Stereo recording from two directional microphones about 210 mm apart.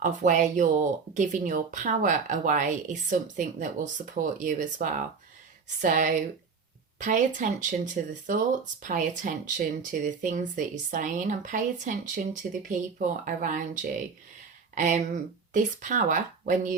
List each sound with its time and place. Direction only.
0.0 s speech: 35° right (ahead or behind)
14.8 s speech: 35° right (ahead or behind)